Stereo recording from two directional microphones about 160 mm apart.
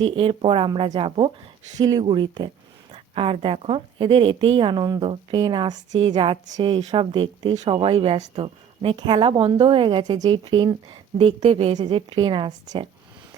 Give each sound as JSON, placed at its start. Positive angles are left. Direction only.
{"t": 0.0, "sound": "a woman's voice", "side_deg": -35}